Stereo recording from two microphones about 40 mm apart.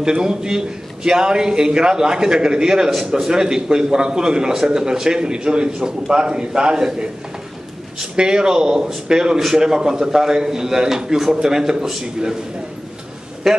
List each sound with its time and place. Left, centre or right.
0.0 s a man's voice: centre
13.4 s a man's voice: centre